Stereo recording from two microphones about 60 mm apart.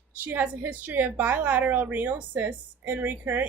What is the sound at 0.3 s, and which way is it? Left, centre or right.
A woman's voice, right.